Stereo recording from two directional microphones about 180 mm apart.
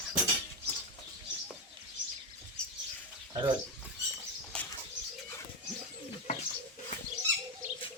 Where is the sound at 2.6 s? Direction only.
5° left (ahead or behind).